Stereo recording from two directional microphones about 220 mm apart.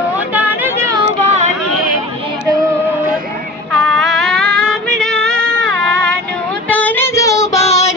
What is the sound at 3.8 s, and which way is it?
Music, centre (ahead or behind).